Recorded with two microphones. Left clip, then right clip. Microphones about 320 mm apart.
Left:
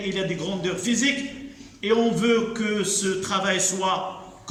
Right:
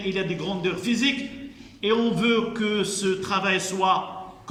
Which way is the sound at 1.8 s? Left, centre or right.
Centre.